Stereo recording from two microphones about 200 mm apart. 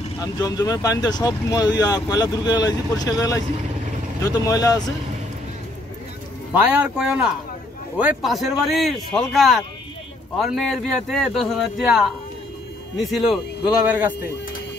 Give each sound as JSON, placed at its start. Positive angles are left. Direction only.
{"t": 0.2, "sound": "speech", "side_deg": 15}
{"t": 6.5, "sound": "speech", "side_deg": -10}